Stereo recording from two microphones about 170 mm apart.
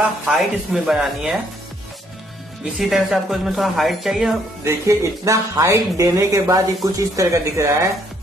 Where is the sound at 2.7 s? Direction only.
Centre (ahead or behind).